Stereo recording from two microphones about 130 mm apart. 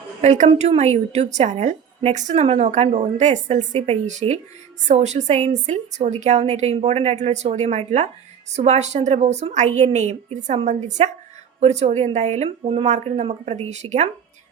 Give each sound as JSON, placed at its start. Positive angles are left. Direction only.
{"t": 0.2, "sound": "a woman's voice", "side_deg": -60}